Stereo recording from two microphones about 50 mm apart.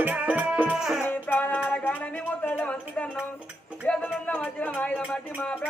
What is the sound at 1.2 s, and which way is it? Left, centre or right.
Music, left.